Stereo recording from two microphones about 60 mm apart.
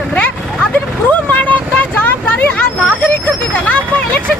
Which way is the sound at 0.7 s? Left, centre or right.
Left.